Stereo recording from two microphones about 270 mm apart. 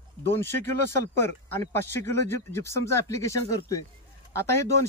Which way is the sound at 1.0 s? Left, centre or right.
Centre.